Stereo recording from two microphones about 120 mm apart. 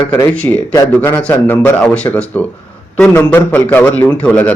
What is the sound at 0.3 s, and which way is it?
A man's voice, 10° left (ahead or behind).